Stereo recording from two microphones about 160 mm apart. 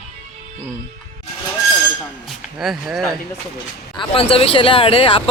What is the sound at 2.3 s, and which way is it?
Speech, centre (ahead or behind).